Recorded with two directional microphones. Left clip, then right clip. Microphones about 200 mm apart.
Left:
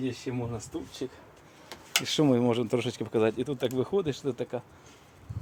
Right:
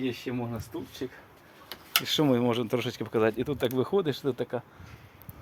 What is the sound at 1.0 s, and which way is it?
Speech, centre (ahead or behind).